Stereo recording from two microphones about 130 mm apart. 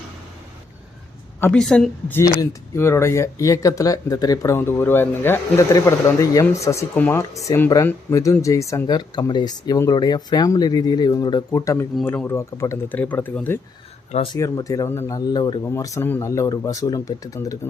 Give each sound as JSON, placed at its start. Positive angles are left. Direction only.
{"t": 1.5, "sound": "speech", "side_deg": 5}
{"t": 2.0, "sound": "speech", "side_deg": 20}
{"t": 12.0, "sound": "speech", "side_deg": 15}
{"t": 14.3, "sound": "speech", "side_deg": 25}
{"t": 15.3, "sound": "speech", "side_deg": 35}
{"t": 15.6, "sound": "speech", "side_deg": 25}